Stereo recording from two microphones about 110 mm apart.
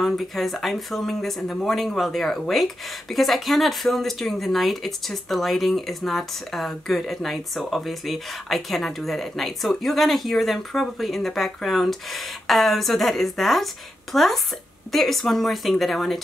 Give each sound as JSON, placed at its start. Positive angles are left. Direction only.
{"t": 0.0, "sound": "speech", "side_deg": 0}